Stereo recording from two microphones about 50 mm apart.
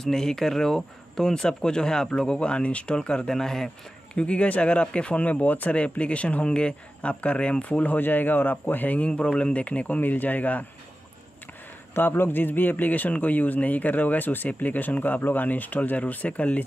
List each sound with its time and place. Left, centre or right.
0.0 s speech: centre
4.1 s speech: left
9.1 s a man's voice: left
12.2 s a man's voice: left